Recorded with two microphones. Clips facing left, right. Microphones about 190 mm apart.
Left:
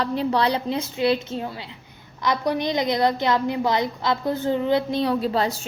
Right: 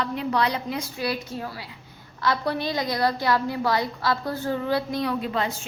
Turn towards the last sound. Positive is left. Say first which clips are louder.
# left 4 dB
turn(degrees=35)  # may be behind; listen again after turning